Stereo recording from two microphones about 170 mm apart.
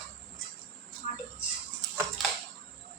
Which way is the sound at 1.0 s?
50° left (ahead or behind).